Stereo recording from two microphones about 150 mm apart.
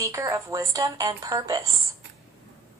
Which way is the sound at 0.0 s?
20° right (ahead or behind).